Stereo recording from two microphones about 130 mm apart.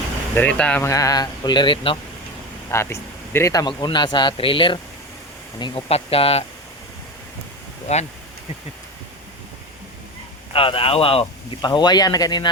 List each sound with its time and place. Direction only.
0.3 s speech: 10° left (ahead or behind)
0.8 s speech: 25° left (ahead or behind); by 2.0 s 40° left (ahead or behind)
2.6 s speech: 20° left (ahead or behind)
5.9 s speech: 50° left (ahead or behind)
7.9 s speech: 60° left (ahead or behind)
10.5 s speech: 45° left (ahead or behind)